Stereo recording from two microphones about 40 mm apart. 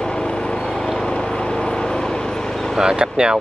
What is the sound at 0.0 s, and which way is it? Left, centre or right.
Vehicle, left.